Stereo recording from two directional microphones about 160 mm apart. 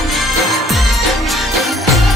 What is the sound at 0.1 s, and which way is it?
Music, centre (ahead or behind).